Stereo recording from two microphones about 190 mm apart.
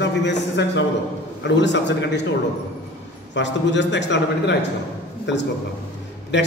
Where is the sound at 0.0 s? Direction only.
65° left (ahead or behind).